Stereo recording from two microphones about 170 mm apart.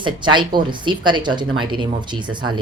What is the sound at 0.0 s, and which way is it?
A man's voice, 25° right (ahead or behind).